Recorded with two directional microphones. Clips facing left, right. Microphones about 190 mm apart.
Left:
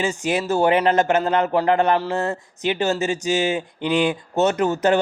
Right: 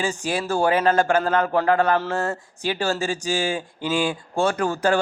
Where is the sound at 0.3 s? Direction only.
20° left (ahead or behind).